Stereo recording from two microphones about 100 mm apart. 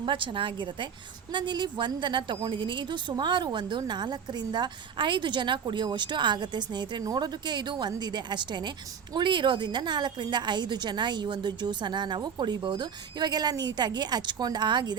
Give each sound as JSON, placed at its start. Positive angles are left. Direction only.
{"t": 0.0, "sound": "a woman's voice", "side_deg": -55}